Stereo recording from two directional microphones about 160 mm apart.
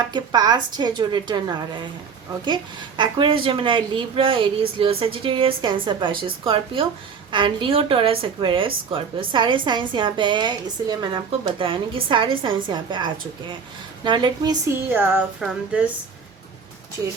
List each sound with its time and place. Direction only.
0.1 s a woman's voice: 25° right (ahead or behind)
3.0 s a woman's voice: 30° right (ahead or behind)
14.8 s speech: 10° right (ahead or behind)
15.4 s a sound: centre (ahead or behind)